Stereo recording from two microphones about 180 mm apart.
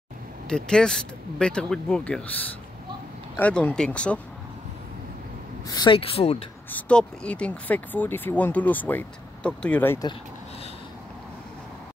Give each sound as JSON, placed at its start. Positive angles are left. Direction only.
{"t": 0.5, "sound": "speech", "side_deg": 5}
{"t": 3.3, "sound": "speech", "side_deg": 10}
{"t": 5.7, "sound": "speech", "side_deg": 25}
{"t": 6.7, "sound": "speech", "side_deg": 5}